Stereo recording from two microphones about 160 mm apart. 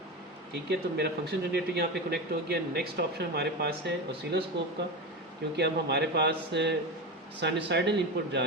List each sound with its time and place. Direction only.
0.7 s speech: 90° right
5.5 s speech: 90° right